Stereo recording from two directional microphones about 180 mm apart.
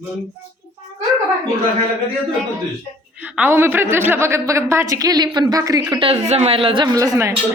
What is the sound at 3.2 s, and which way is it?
A woman's voice, 10° right (ahead or behind).